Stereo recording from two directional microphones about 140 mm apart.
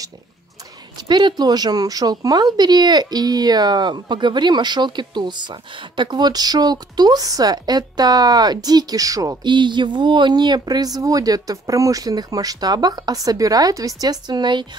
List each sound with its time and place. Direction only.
0.9 s speech: 35° right (ahead or behind)